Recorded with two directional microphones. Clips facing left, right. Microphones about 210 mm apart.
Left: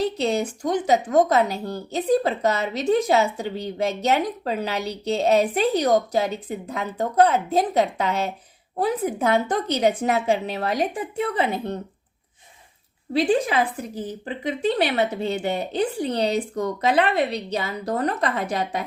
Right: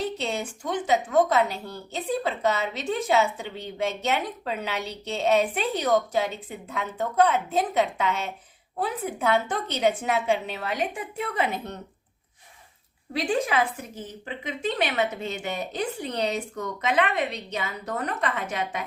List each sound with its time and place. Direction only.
0.0 s speech: 40° left (ahead or behind)
13.1 s speech: 30° left (ahead or behind)